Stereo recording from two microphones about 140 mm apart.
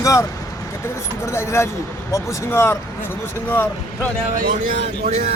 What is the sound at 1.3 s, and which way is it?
Speech, 20° left (ahead or behind).